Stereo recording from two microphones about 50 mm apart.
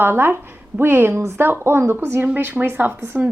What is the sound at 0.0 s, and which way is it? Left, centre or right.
A woman's voice, right.